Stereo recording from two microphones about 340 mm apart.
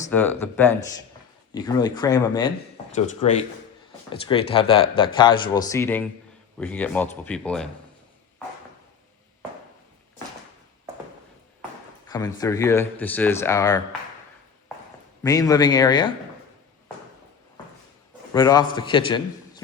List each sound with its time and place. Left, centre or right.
0.0 s speech: centre
12.0 s speech: centre
15.2 s speech: centre
18.3 s speech: centre